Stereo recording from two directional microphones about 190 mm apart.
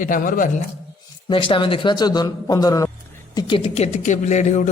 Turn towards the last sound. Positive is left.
turn(degrees=40)  # may be behind; listen again after turning